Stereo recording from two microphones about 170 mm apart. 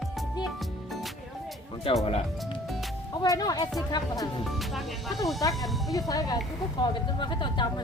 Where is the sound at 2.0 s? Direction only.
35° left (ahead or behind).